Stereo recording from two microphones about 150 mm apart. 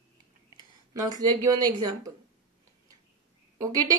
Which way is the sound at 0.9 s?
25° right (ahead or behind).